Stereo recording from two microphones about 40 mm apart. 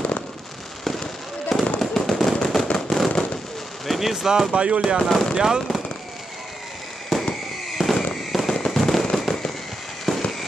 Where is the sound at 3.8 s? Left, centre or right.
Centre.